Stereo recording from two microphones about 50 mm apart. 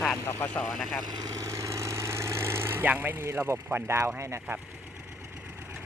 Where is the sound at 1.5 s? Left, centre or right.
Right.